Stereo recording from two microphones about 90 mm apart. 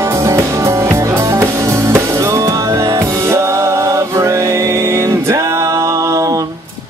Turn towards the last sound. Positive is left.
turn(degrees=-35)  # may be behind; listen again after turning